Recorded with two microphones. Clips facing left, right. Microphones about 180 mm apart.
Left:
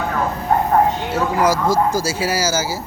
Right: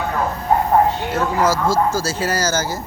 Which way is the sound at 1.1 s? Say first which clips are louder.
Left 2 dB; 10° left (ahead or behind).